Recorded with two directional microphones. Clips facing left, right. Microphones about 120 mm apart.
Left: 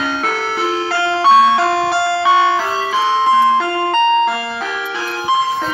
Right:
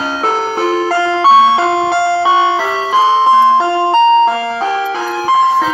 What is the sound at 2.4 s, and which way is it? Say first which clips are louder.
Music: right 2 dB; 25° right (ahead or behind).